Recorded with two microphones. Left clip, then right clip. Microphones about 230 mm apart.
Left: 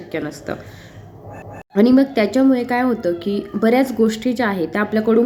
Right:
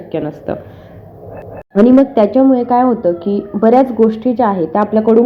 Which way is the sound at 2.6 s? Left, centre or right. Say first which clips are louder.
Right 7 dB; centre.